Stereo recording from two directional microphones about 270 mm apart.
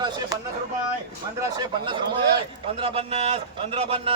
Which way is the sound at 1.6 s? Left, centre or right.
Centre.